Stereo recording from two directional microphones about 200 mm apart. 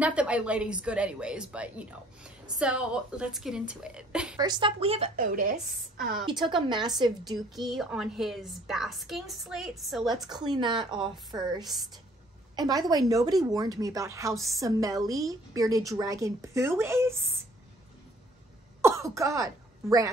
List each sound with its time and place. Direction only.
0.0 s a woman's voice: 5° right (ahead or behind)
4.4 s a woman's voice: 20° right (ahead or behind); by 6.1 s 45° right (ahead or behind)
6.4 s a woman's voice: 25° right (ahead or behind)
7.3 s a woman's voice: centre (ahead or behind)
10.3 s a woman's voice: 20° right (ahead or behind)
18.8 s speech: 15° right (ahead or behind)